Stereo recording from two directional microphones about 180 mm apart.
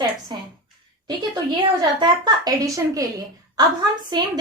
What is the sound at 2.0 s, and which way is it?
A woman's voice, 20° right (ahead or behind).